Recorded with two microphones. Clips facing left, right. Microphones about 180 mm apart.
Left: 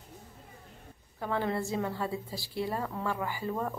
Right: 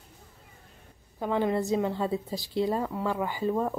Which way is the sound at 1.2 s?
15° right (ahead or behind).